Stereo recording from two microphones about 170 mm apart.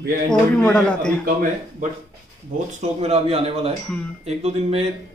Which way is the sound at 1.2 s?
55° right (ahead or behind).